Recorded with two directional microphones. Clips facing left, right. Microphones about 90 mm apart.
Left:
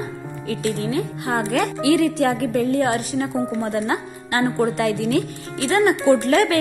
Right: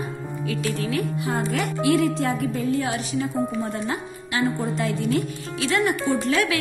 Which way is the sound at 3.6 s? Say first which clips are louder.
Left 5 dB; 70° left (ahead or behind).